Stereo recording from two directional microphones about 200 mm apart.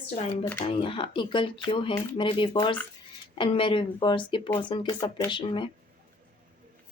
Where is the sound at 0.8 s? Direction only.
25° left (ahead or behind).